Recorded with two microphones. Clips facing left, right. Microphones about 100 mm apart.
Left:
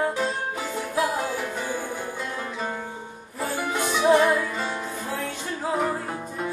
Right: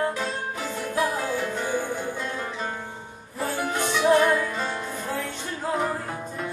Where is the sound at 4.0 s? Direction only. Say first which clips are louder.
Left 1 dB; 20° left (ahead or behind).